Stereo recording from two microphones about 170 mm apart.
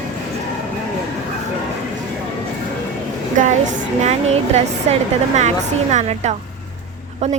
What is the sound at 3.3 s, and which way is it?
A woman's voice, 50° right (ahead or behind).